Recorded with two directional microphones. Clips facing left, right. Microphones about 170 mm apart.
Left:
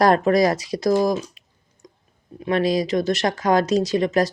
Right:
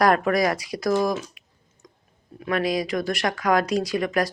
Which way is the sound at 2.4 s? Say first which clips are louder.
Left 4 dB; 30° left (ahead or behind).